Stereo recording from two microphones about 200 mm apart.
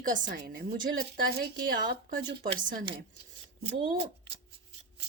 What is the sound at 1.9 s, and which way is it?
Speech, 50° right (ahead or behind).